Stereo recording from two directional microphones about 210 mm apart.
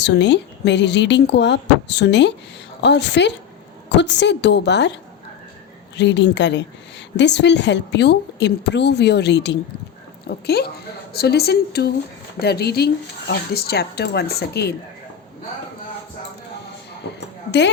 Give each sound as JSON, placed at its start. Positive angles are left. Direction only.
{"t": 0.0, "sound": "a woman's voice", "side_deg": 55}
{"t": 6.0, "sound": "a woman's voice", "side_deg": 55}